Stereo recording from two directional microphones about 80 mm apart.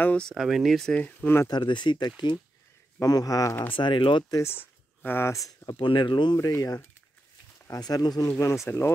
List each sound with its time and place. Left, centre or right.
0.0 s speech: centre
0.3 s speech: centre
0.8 s speech: centre
1.5 s speech: left
3.0 s speech: left
3.7 s speech: left
4.3 s speech: left
5.7 s speech: left
6.5 s speech: left
7.7 s speech: left
8.3 s speech: left